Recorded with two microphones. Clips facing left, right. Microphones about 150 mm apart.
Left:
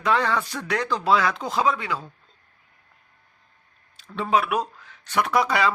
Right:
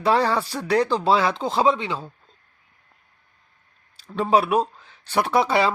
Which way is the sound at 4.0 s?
30° right (ahead or behind).